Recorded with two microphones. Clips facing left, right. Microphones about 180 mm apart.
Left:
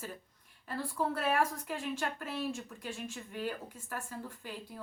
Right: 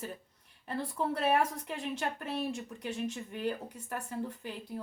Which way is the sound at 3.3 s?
25° right (ahead or behind).